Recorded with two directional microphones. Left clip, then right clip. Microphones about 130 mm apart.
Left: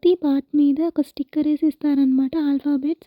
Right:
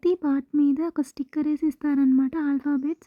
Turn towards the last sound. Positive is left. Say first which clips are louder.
# left 4 dB
turn(degrees=25)  # may be behind; listen again after turning